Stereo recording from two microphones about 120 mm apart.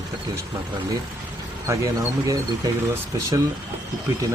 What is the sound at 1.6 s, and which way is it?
Speech, 30° right (ahead or behind).